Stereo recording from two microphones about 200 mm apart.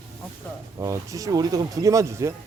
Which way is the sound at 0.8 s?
15° right (ahead or behind).